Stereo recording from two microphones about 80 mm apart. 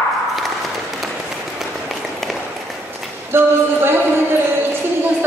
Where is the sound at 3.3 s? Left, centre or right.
Right.